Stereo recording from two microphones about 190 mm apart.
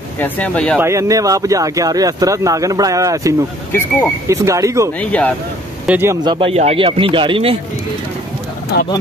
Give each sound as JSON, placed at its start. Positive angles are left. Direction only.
{"t": 0.2, "sound": "speech", "side_deg": 5}
{"t": 0.7, "sound": "speech", "side_deg": -15}
{"t": 4.9, "sound": "speech", "side_deg": 5}
{"t": 5.9, "sound": "speech", "side_deg": -10}
{"t": 6.2, "sound": "speech", "side_deg": -30}